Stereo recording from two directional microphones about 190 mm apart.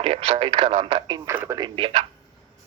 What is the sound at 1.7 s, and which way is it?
Speech, 25° right (ahead or behind).